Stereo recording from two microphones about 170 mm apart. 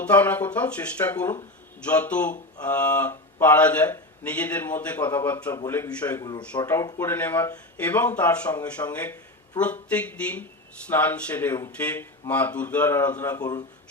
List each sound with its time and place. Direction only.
0.0 s a man's voice: 10° left (ahead or behind)
13.4 s speech: 25° left (ahead or behind)